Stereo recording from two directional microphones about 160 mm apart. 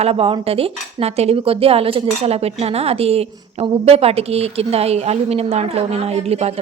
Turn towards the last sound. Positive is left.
turn(degrees=-40)  # may be behind; listen again after turning